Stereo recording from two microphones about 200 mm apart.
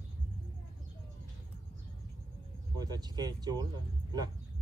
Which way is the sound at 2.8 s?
20° right (ahead or behind).